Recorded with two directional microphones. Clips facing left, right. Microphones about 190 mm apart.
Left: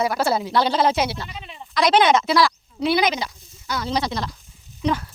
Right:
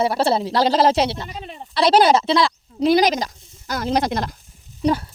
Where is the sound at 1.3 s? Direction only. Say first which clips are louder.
Right 3 dB; 45° right (ahead or behind); by 2.5 s 25° right (ahead or behind).